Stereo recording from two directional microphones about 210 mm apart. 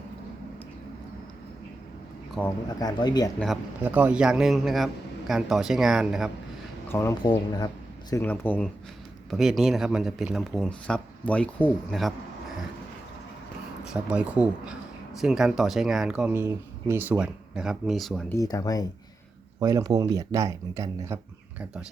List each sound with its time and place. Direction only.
2.6 s speech: 20° left (ahead or behind)
3.3 s speech: centre (ahead or behind)
6.8 s speech: 10° left (ahead or behind)
7.2 s speech: 25° left (ahead or behind)
8.1 s speech: 10° left (ahead or behind)
13.8 s speech: 5° right (ahead or behind)
18.3 s speech: 15° left (ahead or behind)
19.5 s speech: 15° right (ahead or behind)